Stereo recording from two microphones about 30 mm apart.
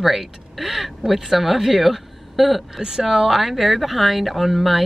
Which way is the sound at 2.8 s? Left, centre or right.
Centre.